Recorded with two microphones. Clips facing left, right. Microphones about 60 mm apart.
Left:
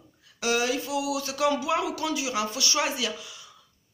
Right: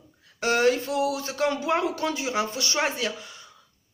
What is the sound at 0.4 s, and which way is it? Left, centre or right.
A man's voice, right.